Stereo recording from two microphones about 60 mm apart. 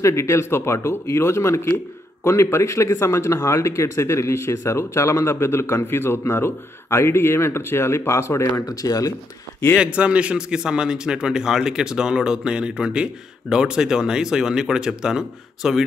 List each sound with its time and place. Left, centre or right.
0.0 s speech: left
8.5 s speech: left
9.8 s a man's voice: centre